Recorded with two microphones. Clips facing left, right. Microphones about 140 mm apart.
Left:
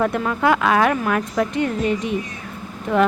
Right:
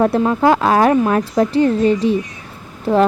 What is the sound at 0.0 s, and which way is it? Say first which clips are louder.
A woman's voice: right 6 dB; 30° right (ahead or behind).